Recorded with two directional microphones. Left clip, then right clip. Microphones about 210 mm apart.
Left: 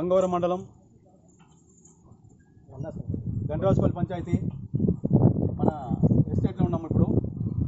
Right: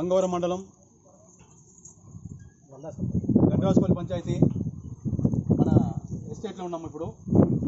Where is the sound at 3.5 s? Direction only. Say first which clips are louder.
Right 1 dB; 5° right (ahead or behind).